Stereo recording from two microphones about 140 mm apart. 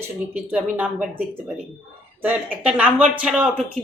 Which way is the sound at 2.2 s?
10° right (ahead or behind).